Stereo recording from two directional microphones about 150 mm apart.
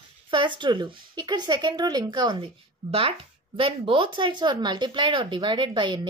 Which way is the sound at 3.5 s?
35° right (ahead or behind).